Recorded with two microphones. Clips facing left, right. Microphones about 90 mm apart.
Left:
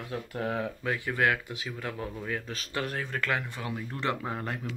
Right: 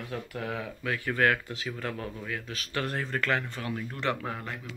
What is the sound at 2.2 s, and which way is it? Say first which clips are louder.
Speech: left 2 dB; 30° left (ahead or behind).